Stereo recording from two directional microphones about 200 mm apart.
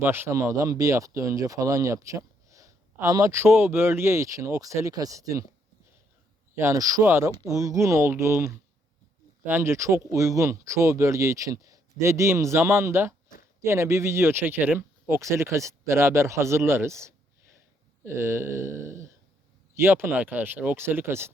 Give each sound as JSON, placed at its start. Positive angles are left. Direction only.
{"t": 0.0, "sound": "speech", "side_deg": -10}
{"t": 6.6, "sound": "speech", "side_deg": -15}